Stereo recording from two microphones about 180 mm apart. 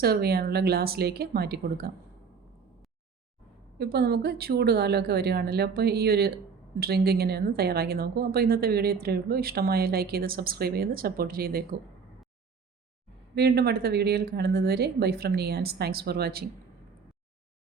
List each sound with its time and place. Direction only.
0.0 s a woman's voice: 60° right (ahead or behind)
3.8 s a woman's voice: 65° right (ahead or behind)
13.3 s a woman's voice: 60° right (ahead or behind)